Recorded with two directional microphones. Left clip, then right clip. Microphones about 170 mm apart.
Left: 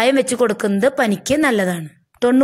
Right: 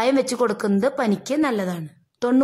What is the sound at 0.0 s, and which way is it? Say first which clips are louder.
A woman's voice: left 4 dB; 5° left (ahead or behind).